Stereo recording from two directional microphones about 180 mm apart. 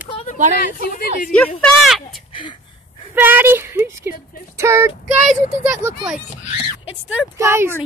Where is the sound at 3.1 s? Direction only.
10° right (ahead or behind).